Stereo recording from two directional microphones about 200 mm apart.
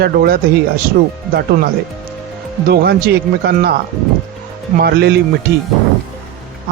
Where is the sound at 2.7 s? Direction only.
50° right (ahead or behind).